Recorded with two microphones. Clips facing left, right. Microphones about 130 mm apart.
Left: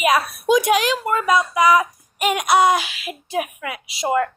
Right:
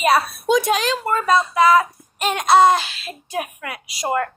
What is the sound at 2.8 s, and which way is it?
Speech, 15° left (ahead or behind).